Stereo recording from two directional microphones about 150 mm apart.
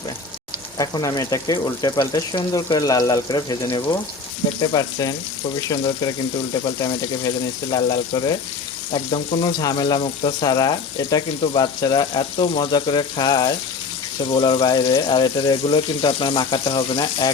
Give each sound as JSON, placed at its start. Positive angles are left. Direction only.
{"t": 0.8, "sound": "speech", "side_deg": 25}
{"t": 10.0, "sound": "frying", "side_deg": 30}